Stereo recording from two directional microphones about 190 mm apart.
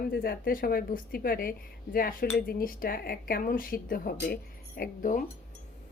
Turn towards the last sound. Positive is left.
turn(degrees=45)  # may be behind; listen again after turning